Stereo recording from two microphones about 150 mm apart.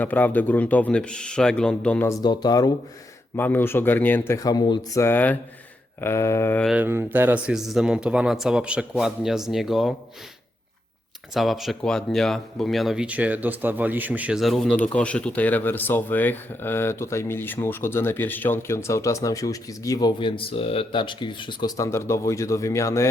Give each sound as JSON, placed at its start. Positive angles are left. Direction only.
{"t": 0.0, "sound": "speech", "side_deg": 10}
{"t": 2.0, "sound": "speech", "side_deg": 25}
{"t": 3.3, "sound": "speech", "side_deg": 15}
{"t": 5.0, "sound": "speech", "side_deg": 10}
{"t": 6.7, "sound": "speech", "side_deg": -15}
{"t": 11.3, "sound": "speech", "side_deg": 0}
{"t": 21.8, "sound": "speech", "side_deg": 20}